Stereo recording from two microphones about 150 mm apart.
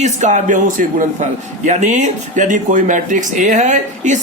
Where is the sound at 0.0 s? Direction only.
50° right (ahead or behind).